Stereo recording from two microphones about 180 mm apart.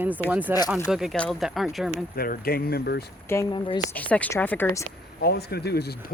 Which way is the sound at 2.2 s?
55° left (ahead or behind).